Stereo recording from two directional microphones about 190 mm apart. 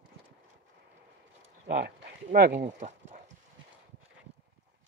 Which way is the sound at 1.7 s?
55° right (ahead or behind).